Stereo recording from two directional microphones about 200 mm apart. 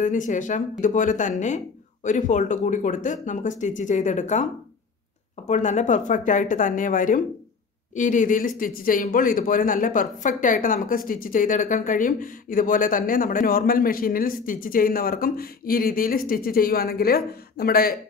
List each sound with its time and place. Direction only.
0.0 s speech: 40° left (ahead or behind)
5.5 s speech: 35° left (ahead or behind)